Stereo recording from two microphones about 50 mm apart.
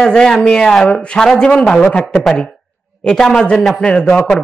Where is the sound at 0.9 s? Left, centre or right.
Left.